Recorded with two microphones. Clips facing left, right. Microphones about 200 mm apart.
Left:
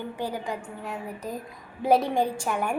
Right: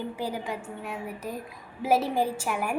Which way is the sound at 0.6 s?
20° left (ahead or behind).